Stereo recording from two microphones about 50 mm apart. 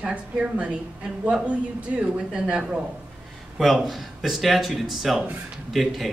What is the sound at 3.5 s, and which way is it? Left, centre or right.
Speech, centre.